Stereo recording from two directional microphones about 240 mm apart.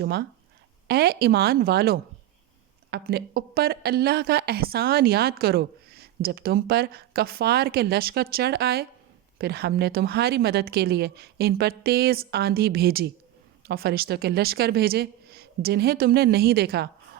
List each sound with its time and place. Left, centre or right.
0.0 s a woman's voice: right